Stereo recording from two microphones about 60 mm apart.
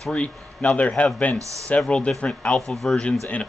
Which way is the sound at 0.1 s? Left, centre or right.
Left.